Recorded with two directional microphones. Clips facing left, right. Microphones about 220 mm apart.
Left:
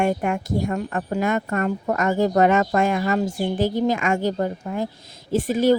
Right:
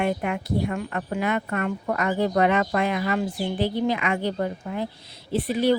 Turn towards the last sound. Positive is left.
turn(degrees=45)  # may be behind; listen again after turning